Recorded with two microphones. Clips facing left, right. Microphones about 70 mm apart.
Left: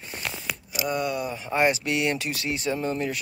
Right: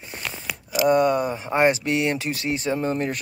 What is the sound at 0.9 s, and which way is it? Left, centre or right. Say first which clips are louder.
Speech: right 8 dB; right.